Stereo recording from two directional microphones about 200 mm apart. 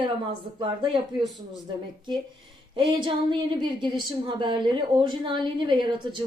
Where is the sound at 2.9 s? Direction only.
25° right (ahead or behind).